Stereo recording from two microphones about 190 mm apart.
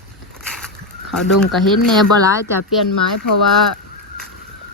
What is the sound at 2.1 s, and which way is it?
Speech, 15° right (ahead or behind).